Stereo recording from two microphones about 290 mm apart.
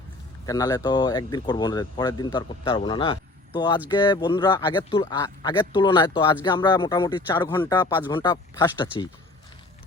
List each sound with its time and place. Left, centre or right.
0.4 s speech: centre